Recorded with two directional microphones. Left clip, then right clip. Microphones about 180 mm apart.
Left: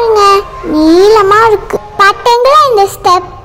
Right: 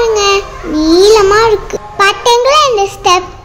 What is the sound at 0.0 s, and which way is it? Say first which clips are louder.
Babbling: left 4 dB; 10° left (ahead or behind).